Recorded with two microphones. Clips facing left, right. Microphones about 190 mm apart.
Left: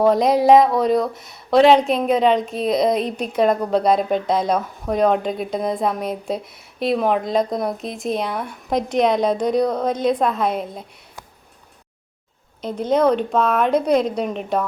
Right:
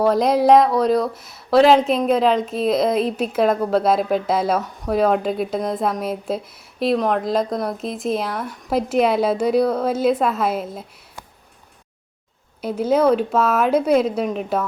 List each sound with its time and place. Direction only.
0.0 s speech: centre (ahead or behind)
12.6 s speech: 5° right (ahead or behind)